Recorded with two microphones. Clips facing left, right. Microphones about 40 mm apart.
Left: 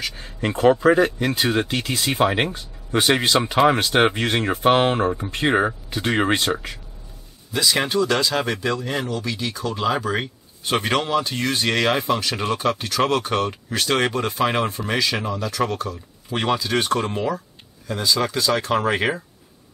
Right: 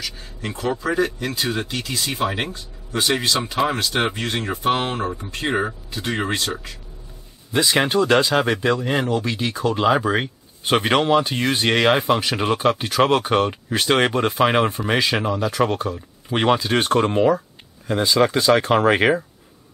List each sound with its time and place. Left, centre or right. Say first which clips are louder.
0.0 s speech: left 4 dB; left
2.2 s speech: left 4 dB; left
2.5 s speech: left 4 dB; left
7.5 s speech: right 2 dB; right